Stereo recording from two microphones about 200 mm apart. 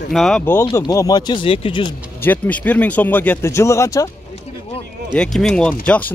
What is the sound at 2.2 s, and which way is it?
Speech, 10° left (ahead or behind).